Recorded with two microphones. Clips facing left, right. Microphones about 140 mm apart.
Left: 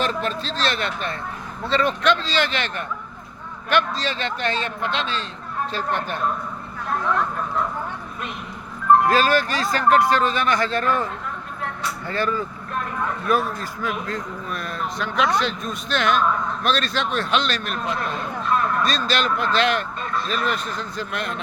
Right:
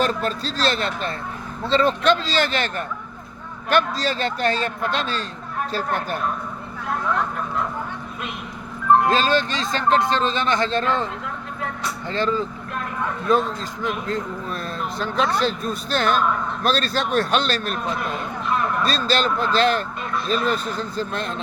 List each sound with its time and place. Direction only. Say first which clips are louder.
0.0 s a man's voice: right 2 dB; 40° right (ahead or behind)
9.0 s a man's voice: left 1 dB; 25° right (ahead or behind)
18.9 s a man's voice: right 1 dB; 30° right (ahead or behind)